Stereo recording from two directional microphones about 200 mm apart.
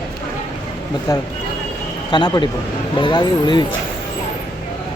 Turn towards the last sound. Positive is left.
turn(degrees=20)  # may be behind; listen again after turning